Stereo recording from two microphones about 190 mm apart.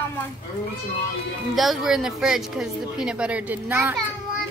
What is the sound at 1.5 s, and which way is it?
A woman's voice, centre (ahead or behind).